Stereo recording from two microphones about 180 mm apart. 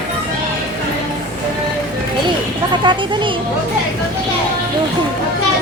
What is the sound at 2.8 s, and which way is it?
Music, 25° right (ahead or behind).